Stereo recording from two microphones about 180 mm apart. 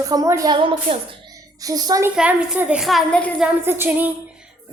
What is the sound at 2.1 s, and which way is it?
A woman's voice, 5° right (ahead or behind).